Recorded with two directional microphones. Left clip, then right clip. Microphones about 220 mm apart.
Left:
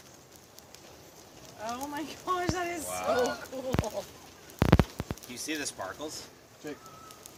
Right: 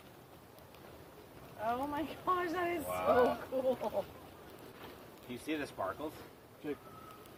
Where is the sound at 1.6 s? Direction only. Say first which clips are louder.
Even; 10° right (ahead or behind).